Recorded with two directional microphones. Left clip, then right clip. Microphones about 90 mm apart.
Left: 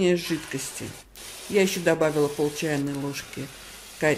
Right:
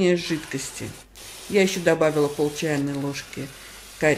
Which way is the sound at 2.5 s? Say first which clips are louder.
Right 2 dB; 40° left (ahead or behind).